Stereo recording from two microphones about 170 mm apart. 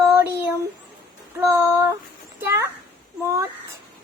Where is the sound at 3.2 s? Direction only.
15° right (ahead or behind).